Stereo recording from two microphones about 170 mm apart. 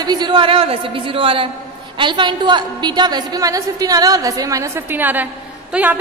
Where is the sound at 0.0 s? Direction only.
25° right (ahead or behind).